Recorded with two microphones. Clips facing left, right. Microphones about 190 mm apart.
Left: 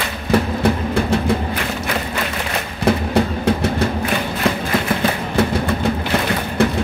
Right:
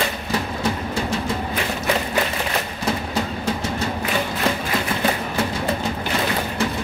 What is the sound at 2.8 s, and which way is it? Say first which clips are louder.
Music: left 10 dB; 55° left (ahead or behind).